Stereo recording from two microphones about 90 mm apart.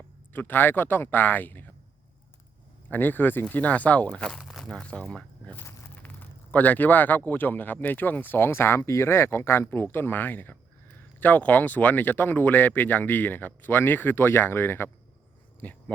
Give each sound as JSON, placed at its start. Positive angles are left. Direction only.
{"t": 0.3, "sound": "speech", "side_deg": 20}
{"t": 2.9, "sound": "speech", "side_deg": 20}
{"t": 4.4, "sound": "speech", "side_deg": 0}
{"t": 5.5, "sound": "speech", "side_deg": 20}